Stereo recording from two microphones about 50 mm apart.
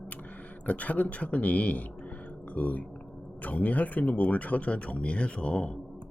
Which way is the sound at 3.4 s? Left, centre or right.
Left.